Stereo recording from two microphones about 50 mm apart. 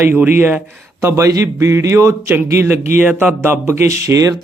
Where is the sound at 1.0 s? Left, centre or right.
Right.